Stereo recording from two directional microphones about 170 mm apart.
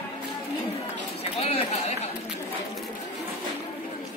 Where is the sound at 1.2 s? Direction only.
35° left (ahead or behind).